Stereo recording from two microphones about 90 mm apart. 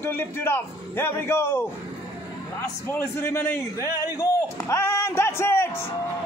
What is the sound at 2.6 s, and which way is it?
A man's voice, 30° left (ahead or behind).